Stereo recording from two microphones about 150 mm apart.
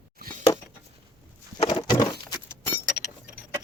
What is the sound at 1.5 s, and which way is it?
Keys jangling, 30° left (ahead or behind).